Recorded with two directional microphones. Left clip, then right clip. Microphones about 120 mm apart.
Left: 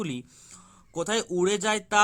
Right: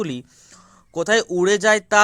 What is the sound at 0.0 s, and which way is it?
Speech, 25° right (ahead or behind).